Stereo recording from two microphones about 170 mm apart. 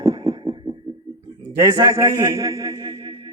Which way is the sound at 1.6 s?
20° right (ahead or behind).